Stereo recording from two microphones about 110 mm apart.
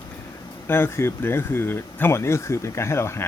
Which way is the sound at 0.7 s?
20° left (ahead or behind).